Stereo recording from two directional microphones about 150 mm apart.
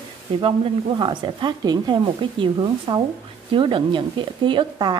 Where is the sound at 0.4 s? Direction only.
35° right (ahead or behind).